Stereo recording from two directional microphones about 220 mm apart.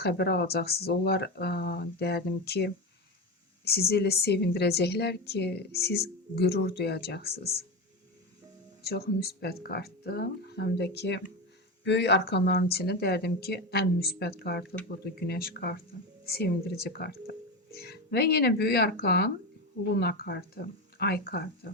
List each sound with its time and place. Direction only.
0.0 s a woman's voice: 45° left (ahead or behind)
8.8 s a woman's voice: 45° left (ahead or behind)